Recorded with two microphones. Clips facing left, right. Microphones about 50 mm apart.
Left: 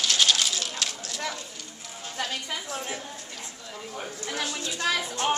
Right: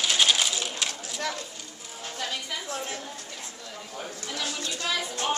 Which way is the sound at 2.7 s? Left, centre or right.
Centre.